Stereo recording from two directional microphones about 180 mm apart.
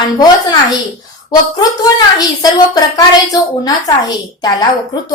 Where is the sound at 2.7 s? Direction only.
20° left (ahead or behind).